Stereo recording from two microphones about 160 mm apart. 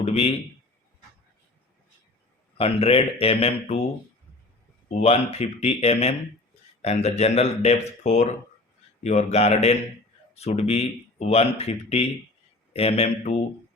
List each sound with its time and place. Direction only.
0.0 s a man's voice: 40° left (ahead or behind)
2.6 s speech: 35° left (ahead or behind)
4.9 s speech: 40° left (ahead or behind)